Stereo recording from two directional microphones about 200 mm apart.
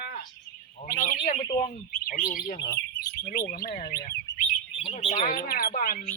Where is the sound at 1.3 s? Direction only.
25° left (ahead or behind).